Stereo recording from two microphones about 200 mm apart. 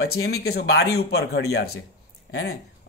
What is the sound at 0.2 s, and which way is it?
Speech, 55° left (ahead or behind).